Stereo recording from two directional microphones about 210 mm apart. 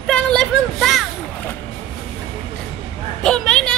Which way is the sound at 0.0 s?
5° left (ahead or behind).